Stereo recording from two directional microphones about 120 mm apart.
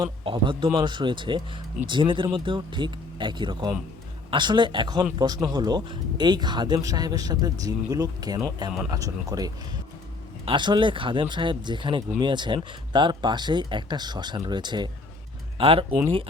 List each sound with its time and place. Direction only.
0.0 s speech: 45° right (ahead or behind)
10.4 s speech: 40° right (ahead or behind)
15.5 s speech: 50° right (ahead or behind)